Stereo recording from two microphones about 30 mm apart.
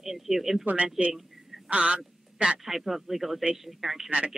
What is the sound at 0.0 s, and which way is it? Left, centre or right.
Speech, centre.